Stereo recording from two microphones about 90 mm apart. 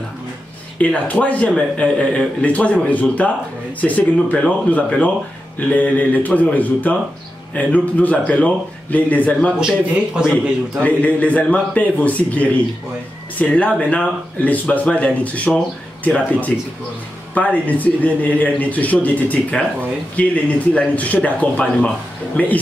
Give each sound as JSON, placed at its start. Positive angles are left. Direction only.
{"t": 0.7, "sound": "speech", "side_deg": 15}
{"t": 9.6, "sound": "speech", "side_deg": -10}
{"t": 10.8, "sound": "speech", "side_deg": 15}